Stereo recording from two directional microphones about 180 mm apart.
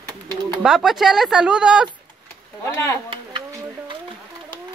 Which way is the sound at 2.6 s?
15° left (ahead or behind).